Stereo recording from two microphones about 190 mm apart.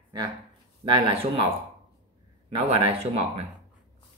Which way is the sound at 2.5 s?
30° right (ahead or behind).